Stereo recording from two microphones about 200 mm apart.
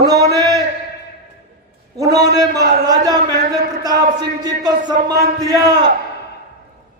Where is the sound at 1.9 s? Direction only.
20° right (ahead or behind).